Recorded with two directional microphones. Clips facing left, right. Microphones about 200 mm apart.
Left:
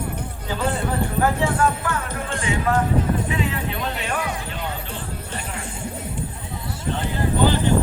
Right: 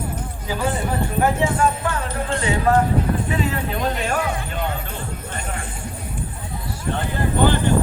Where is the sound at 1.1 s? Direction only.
20° right (ahead or behind); by 4.2 s 45° right (ahead or behind).